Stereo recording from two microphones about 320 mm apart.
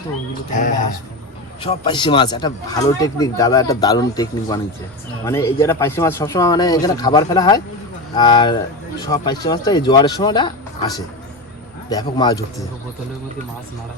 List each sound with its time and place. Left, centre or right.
0.5 s speech: left